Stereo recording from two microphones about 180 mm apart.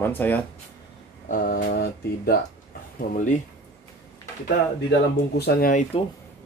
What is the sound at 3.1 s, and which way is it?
Speech, 45° left (ahead or behind).